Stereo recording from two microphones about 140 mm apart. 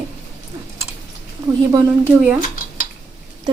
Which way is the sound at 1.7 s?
15° right (ahead or behind).